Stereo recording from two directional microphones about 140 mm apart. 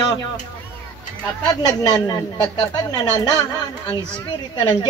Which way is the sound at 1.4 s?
30° left (ahead or behind).